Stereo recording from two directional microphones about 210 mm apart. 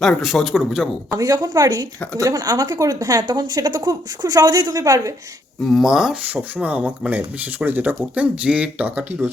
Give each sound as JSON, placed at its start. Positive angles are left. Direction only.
{"t": 0.0, "sound": "speech", "side_deg": 0}
{"t": 1.1, "sound": "speech", "side_deg": -20}
{"t": 5.6, "sound": "speech", "side_deg": 0}